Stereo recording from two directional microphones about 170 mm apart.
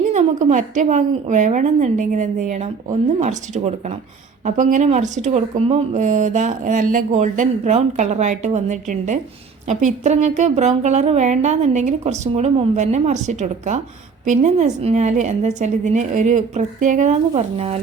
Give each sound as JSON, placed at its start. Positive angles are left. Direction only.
{"t": 0.1, "sound": "speech", "side_deg": -45}